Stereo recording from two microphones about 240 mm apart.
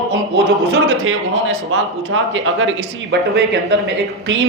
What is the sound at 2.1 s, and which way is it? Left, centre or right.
A man's voice, right.